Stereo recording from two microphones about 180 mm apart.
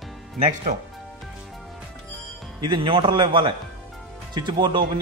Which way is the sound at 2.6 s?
25° right (ahead or behind).